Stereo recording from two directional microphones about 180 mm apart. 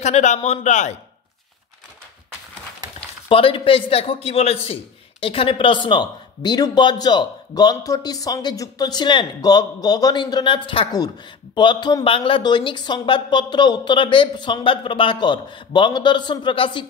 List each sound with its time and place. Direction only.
0.0 s speech: 40° left (ahead or behind)
3.3 s a man's voice: 30° left (ahead or behind)